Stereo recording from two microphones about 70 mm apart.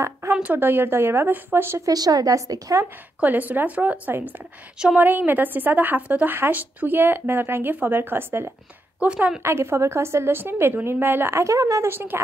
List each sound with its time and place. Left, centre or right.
0.3 s a woman's voice: right
1.9 s a woman's voice: right
3.2 s speech: right
4.7 s a woman's voice: centre
5.0 s speech: right
9.0 s a woman's voice: centre
9.4 s a woman's voice: right
11.9 s a woman's voice: right